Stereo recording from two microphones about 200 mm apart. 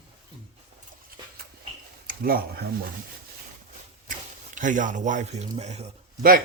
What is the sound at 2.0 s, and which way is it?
Speech, 50° right (ahead or behind).